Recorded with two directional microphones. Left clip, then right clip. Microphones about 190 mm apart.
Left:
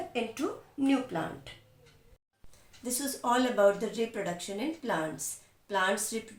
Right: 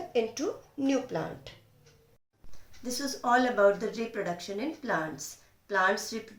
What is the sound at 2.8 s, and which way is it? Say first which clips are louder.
Speech: right 1 dB; 5° left (ahead or behind).